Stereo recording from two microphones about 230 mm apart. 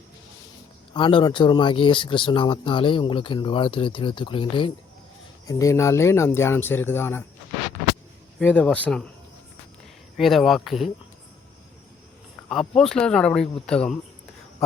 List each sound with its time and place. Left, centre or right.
0.9 s speech: left
8.4 s speech: centre
10.2 s speech: centre
12.5 s speech: centre